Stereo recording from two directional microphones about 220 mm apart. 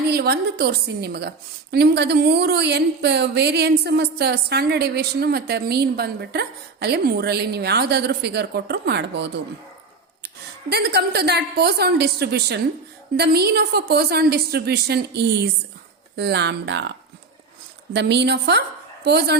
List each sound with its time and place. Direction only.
0.1 s a woman's voice: 45° right (ahead or behind)
17.9 s a woman's voice: 50° right (ahead or behind)